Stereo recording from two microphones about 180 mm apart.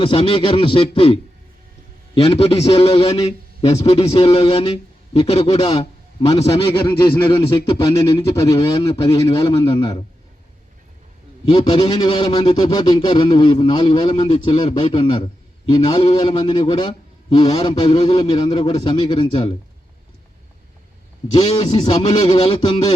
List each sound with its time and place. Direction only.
0.0 s a man's voice: 30° left (ahead or behind)
6.8 s speech: 15° left (ahead or behind)
7.3 s a man's voice: 30° left (ahead or behind)
9.4 s a man's voice: 30° left (ahead or behind)
11.4 s a man's voice: 25° left (ahead or behind)
21.3 s a man's voice: 35° left (ahead or behind)